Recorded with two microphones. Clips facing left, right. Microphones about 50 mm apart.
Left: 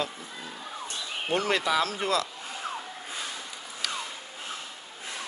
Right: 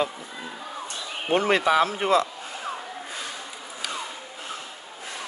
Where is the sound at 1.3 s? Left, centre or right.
Right.